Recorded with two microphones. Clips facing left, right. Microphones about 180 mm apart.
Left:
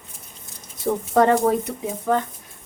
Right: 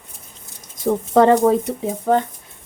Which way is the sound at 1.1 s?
25° right (ahead or behind).